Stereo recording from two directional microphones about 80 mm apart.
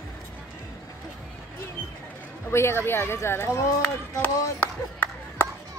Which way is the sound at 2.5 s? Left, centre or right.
Left.